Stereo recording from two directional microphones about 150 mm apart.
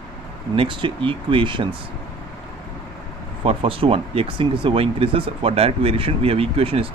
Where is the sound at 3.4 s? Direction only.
40° right (ahead or behind).